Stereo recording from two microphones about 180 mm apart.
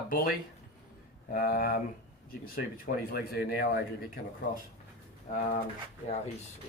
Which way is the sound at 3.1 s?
60° left (ahead or behind).